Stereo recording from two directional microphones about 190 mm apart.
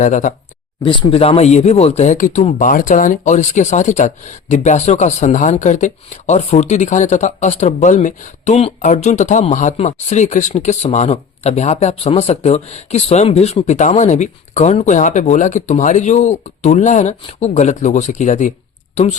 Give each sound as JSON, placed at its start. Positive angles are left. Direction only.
{"t": 0.0, "sound": "speech", "side_deg": 40}
{"t": 0.9, "sound": "speech", "side_deg": 30}